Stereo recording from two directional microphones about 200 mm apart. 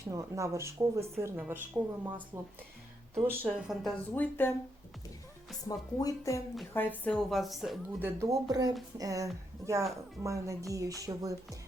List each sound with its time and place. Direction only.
0.0 s a woman's voice: 15° right (ahead or behind); by 4.5 s 10° left (ahead or behind)
5.6 s a woman's voice: 15° left (ahead or behind); by 11.3 s 15° right (ahead or behind)